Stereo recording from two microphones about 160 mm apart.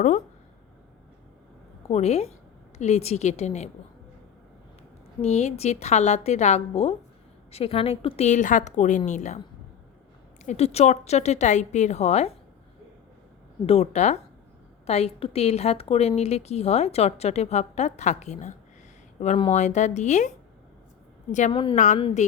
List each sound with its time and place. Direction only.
1.9 s a woman's voice: 40° left (ahead or behind)
5.2 s a woman's voice: 40° left (ahead or behind)
10.4 s a woman's voice: 45° left (ahead or behind)
13.7 s a woman's voice: 45° left (ahead or behind)
21.5 s a woman's voice: 35° left (ahead or behind)